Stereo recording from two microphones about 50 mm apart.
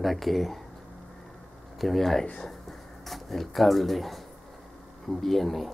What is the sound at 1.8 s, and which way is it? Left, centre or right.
Speech, centre.